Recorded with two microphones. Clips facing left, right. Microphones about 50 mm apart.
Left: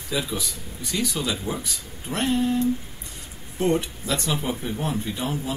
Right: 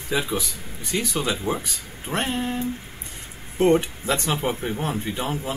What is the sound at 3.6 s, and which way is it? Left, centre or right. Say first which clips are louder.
Speech: right 4 dB; right.